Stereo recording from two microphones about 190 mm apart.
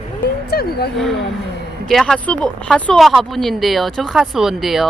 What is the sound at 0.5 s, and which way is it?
Speech, 55° left (ahead or behind).